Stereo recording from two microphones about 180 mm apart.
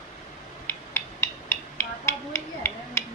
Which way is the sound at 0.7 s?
15° left (ahead or behind).